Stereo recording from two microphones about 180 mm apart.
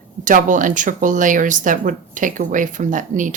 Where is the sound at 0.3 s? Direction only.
45° right (ahead or behind).